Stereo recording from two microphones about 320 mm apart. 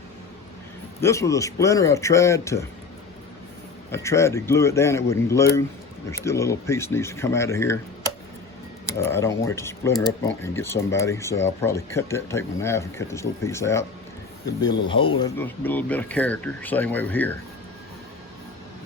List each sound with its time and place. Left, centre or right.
1.0 s speech: centre
3.9 s speech: centre
9.0 s speech: centre